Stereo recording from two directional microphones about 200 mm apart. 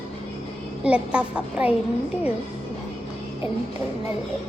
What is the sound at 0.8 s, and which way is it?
Speech, 5° right (ahead or behind).